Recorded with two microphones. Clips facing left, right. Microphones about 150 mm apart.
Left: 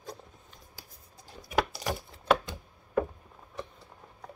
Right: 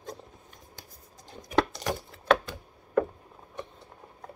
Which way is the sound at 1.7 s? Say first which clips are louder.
Right 2 dB; 5° left (ahead or behind).